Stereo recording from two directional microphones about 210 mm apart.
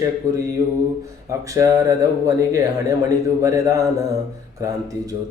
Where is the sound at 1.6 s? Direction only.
15° right (ahead or behind).